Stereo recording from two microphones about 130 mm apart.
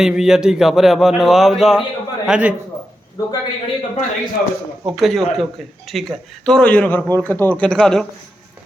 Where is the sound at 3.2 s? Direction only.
30° left (ahead or behind).